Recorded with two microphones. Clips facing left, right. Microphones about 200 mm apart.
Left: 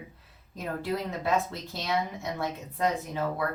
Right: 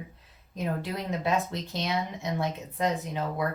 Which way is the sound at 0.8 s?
20° right (ahead or behind).